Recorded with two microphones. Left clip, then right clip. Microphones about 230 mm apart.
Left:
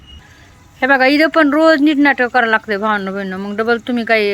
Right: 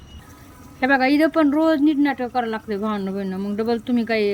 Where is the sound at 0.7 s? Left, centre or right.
Centre.